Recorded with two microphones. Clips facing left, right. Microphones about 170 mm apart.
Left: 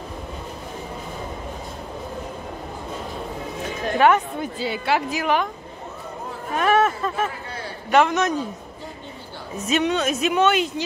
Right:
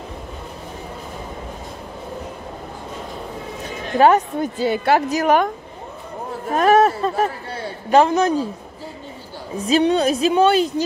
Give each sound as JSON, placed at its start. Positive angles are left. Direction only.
{"t": 4.0, "sound": "a woman's voice", "side_deg": -40}
{"t": 6.5, "sound": "a man's voice", "side_deg": -40}
{"t": 9.7, "sound": "speech", "side_deg": -30}